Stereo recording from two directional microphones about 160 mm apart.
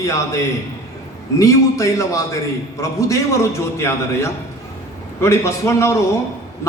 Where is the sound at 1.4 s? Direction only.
20° left (ahead or behind).